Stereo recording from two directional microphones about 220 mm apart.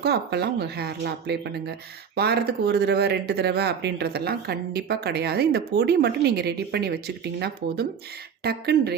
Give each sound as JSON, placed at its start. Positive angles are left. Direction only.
{"t": 0.0, "sound": "speech", "side_deg": -50}